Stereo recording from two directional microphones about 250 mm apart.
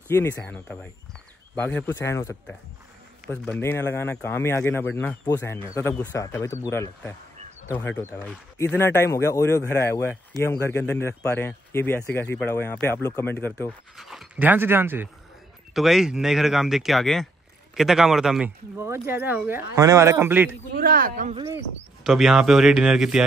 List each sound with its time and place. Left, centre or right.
0.1 s speech: centre
20.7 s a man's voice: right
22.0 s speech: centre